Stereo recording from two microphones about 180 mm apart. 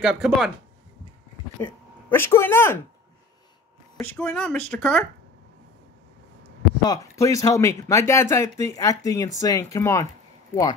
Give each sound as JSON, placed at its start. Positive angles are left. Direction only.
{"t": 0.0, "sound": "speech", "side_deg": -5}
{"t": 1.6, "sound": "speech", "side_deg": 10}
{"t": 4.0, "sound": "speech", "side_deg": 5}
{"t": 6.8, "sound": "speech", "side_deg": 20}